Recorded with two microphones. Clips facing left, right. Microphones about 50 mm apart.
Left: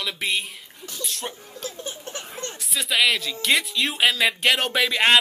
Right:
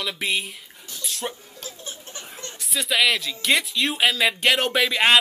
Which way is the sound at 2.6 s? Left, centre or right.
Centre.